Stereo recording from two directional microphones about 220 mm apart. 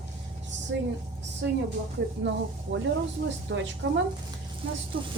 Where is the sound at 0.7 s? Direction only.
50° right (ahead or behind).